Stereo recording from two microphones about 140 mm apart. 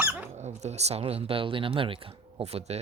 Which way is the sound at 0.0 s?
20° right (ahead or behind).